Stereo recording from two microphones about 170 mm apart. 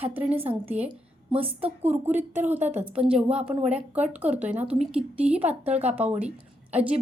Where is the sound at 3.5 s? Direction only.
40° right (ahead or behind).